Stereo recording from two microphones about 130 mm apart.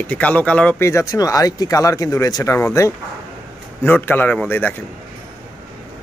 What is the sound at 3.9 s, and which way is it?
Speech, 15° left (ahead or behind).